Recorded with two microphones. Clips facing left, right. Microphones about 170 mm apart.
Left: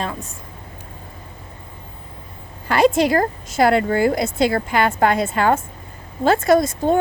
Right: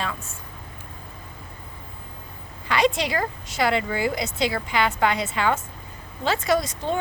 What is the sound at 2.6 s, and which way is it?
A woman's voice, 50° left (ahead or behind).